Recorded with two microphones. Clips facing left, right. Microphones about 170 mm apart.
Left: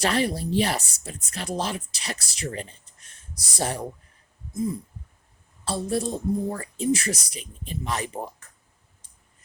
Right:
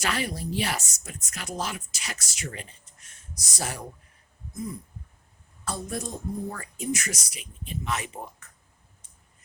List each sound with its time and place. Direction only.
0.0 s speech: 35° left (ahead or behind)
5.6 s speech: 30° left (ahead or behind)